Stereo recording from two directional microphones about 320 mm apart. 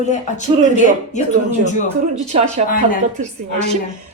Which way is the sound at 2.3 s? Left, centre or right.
Right.